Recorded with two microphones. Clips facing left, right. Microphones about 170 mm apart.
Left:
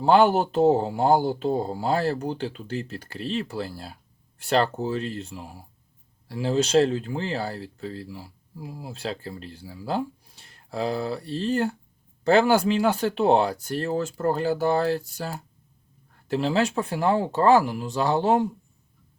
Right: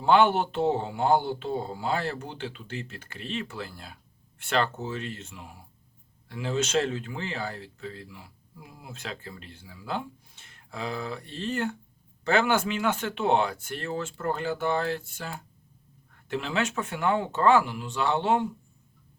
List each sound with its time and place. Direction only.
0.0 s speech: 40° left (ahead or behind)